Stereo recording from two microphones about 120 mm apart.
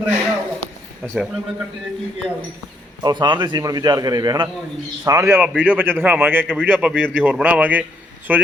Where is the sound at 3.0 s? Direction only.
40° right (ahead or behind).